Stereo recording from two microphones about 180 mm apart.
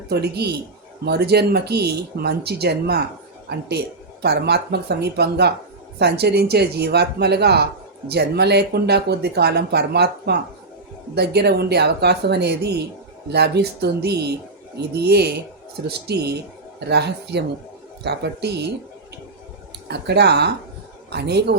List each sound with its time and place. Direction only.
0.1 s speech: 65° right (ahead or behind)
19.9 s speech: 70° right (ahead or behind)